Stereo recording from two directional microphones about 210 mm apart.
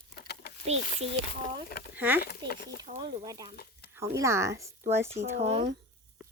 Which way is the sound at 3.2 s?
20° right (ahead or behind).